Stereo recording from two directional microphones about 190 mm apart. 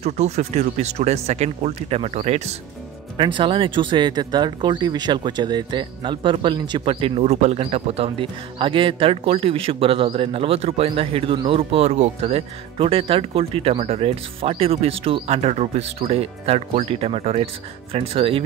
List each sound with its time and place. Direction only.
0.0 s speech: 35° right (ahead or behind)